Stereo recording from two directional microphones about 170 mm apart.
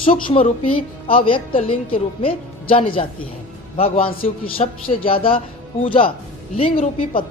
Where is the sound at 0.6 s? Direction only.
30° left (ahead or behind).